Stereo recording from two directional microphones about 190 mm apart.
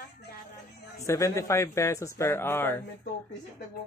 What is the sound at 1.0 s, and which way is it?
Speech, 15° left (ahead or behind).